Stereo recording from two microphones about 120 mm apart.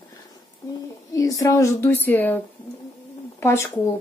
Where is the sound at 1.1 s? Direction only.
30° left (ahead or behind).